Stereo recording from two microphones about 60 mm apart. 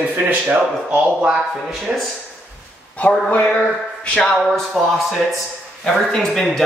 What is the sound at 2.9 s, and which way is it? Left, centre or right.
Speech, left.